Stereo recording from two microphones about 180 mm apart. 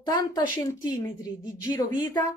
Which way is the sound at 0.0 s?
25° left (ahead or behind).